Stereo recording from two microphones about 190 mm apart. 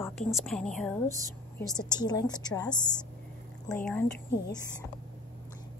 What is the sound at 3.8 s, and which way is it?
Speech, 10° left (ahead or behind).